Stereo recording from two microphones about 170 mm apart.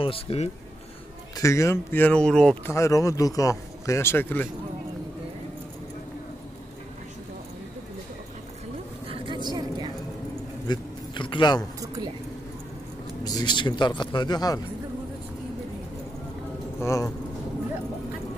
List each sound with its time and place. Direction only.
0.0 s speech: 35° left (ahead or behind)
1.3 s speech: 20° left (ahead or behind)
2.7 s speech: 20° left (ahead or behind)
9.0 s a sound: 30° right (ahead or behind)
10.7 s a sound: 30° left (ahead or behind)
11.8 s speech: 20° right (ahead or behind)
13.2 s a man's voice: 25° left (ahead or behind)
16.8 s a man's voice: 20° left (ahead or behind)